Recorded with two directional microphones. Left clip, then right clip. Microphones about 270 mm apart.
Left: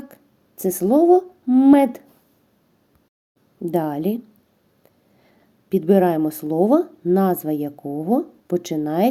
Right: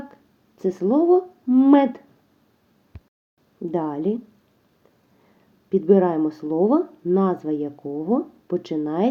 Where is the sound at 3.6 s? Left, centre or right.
Left.